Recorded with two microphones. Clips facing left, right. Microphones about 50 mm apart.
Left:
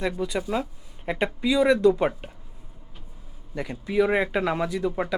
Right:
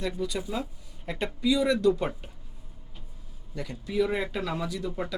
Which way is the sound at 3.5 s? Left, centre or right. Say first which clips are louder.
Left 5 dB; left.